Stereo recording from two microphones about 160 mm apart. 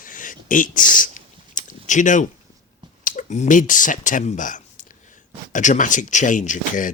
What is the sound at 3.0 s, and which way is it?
Speech, 55° left (ahead or behind).